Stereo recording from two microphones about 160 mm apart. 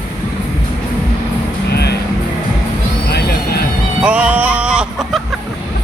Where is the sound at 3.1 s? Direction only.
90° left.